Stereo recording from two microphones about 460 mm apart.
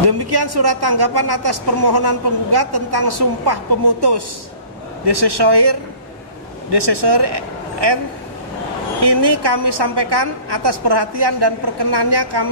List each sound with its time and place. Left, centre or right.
0.0 s a woman's voice: right
9.0 s a woman's voice: right